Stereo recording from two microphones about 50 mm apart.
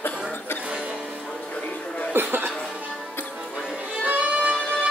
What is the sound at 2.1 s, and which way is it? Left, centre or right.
Chuckle, right.